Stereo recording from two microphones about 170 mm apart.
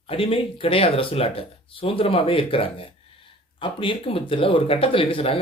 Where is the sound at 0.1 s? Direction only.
35° left (ahead or behind).